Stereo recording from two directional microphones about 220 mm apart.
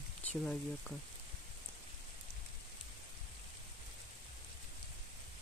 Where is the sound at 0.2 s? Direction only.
5° left (ahead or behind).